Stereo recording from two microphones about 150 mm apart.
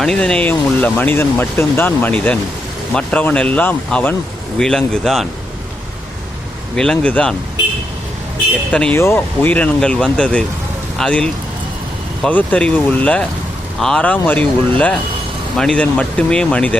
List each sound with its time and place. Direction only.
0.0 s speech: 5° left (ahead or behind)
6.7 s speech: 5° left (ahead or behind)
8.7 s speech: 10° left (ahead or behind)